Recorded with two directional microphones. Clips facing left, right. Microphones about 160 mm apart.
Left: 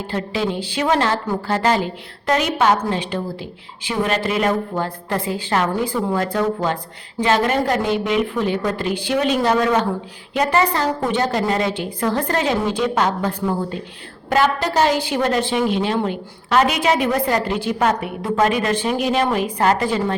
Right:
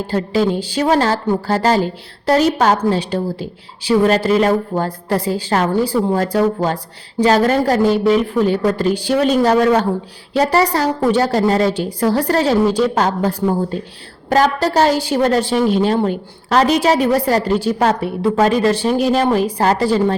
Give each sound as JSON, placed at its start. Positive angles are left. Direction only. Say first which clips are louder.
{"t": 0.1, "sound": "a woman's voice", "louder": "right 6 dB", "side_deg": -40}